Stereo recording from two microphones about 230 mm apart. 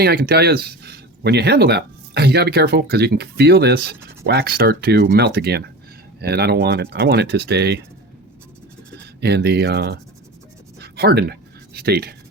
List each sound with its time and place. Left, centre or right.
0.0 s speech: right
9.2 s speech: right
10.8 s a sound: right